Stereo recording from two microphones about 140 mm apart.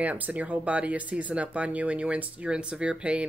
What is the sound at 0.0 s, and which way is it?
Speech, 10° right (ahead or behind).